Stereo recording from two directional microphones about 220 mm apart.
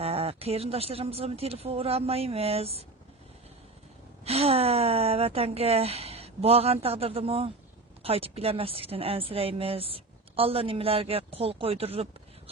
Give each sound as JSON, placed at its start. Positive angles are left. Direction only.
{"t": 0.0, "sound": "speech", "side_deg": -25}
{"t": 4.3, "sound": "speech", "side_deg": -30}